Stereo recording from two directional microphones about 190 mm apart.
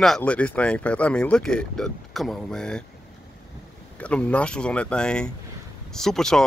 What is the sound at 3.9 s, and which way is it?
Speech, 5° left (ahead or behind).